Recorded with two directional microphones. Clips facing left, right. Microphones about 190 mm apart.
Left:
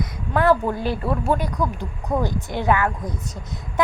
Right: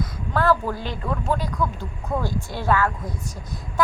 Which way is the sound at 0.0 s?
20° left (ahead or behind).